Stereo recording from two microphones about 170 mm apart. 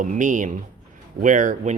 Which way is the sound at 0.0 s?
50° right (ahead or behind).